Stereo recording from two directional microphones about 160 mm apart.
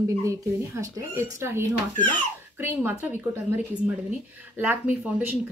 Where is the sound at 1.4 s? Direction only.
15° right (ahead or behind).